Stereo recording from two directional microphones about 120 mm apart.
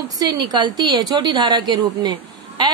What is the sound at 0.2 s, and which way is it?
A woman's voice, 35° right (ahead or behind).